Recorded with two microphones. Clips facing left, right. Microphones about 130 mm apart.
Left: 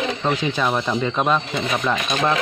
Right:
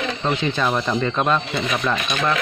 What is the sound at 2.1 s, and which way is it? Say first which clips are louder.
Speech: left 3 dB; 30° left (ahead or behind).